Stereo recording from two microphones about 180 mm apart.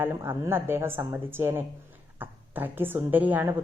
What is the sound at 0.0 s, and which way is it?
A woman's voice, 15° right (ahead or behind).